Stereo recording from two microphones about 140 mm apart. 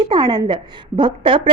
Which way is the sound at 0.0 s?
30° right (ahead or behind).